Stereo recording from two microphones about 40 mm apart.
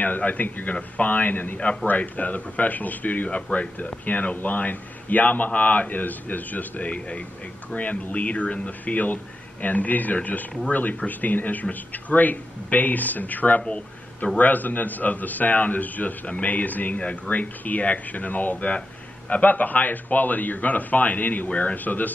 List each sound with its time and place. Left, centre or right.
0.0 s a man's voice: left
14.2 s a man's voice: left
14.5 s a man's voice: left